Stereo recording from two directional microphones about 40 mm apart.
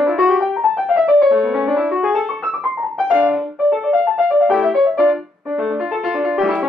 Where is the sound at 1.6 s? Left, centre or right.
Centre.